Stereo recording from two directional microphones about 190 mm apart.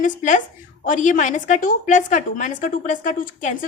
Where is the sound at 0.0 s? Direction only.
40° left (ahead or behind).